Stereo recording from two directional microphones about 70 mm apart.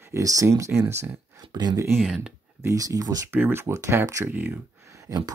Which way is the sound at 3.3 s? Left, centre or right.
Right.